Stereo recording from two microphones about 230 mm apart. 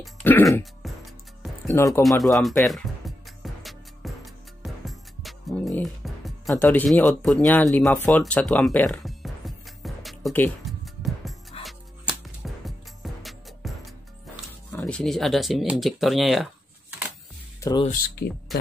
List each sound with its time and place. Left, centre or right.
0.0 s throat clearing: centre
0.8 s music: centre
1.7 s speech: centre
2.2 s speech: centre
2.6 s music: centre
11.5 s music: left
12.6 s music: centre
14.7 s speech: centre
17.6 s music: centre
18.2 s speech: left